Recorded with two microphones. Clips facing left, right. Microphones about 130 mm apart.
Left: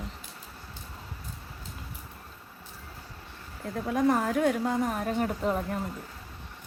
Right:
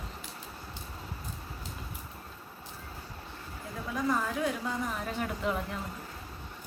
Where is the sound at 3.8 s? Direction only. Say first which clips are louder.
Left 6 dB; 55° left (ahead or behind); by 5.8 s 40° left (ahead or behind).